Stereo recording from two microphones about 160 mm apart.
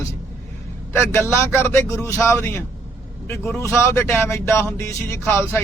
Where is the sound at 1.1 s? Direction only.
15° left (ahead or behind).